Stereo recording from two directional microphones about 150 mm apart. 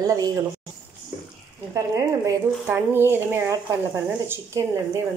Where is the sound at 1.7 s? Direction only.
25° right (ahead or behind).